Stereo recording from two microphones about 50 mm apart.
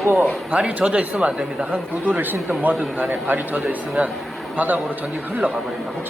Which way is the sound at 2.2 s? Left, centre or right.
Right.